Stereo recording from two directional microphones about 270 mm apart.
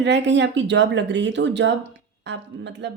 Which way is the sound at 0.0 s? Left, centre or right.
Right.